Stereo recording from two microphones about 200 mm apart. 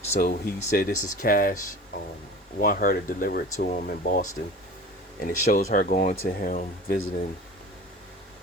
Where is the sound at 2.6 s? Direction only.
45° left (ahead or behind).